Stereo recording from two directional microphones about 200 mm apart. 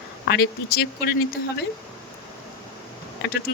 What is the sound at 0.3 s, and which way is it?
Speech, 55° left (ahead or behind).